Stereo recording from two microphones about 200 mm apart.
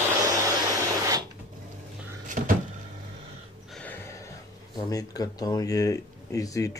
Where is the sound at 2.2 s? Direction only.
45° right (ahead or behind).